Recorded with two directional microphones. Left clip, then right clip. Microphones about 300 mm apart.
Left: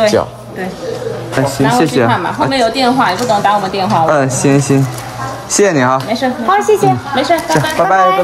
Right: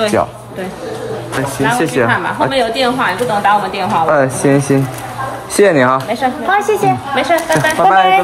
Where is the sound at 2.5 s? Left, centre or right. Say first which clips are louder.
Left 3 dB; left.